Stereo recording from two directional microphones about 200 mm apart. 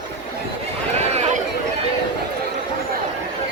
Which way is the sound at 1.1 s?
35° right (ahead or behind).